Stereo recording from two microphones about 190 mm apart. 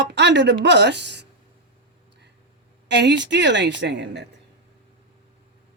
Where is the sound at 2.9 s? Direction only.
65° right (ahead or behind).